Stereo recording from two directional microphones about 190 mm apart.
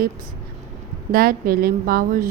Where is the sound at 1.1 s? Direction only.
50° right (ahead or behind).